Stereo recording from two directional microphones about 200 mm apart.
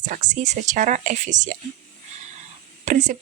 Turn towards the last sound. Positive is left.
turn(degrees=-40)  # may be behind; listen again after turning